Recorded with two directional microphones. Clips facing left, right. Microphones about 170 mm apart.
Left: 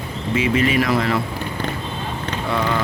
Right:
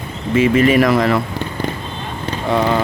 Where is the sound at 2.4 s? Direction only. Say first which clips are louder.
Right 6 dB; 40° right (ahead or behind).